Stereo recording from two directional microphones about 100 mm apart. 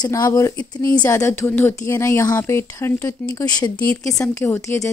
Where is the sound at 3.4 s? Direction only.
40° left (ahead or behind).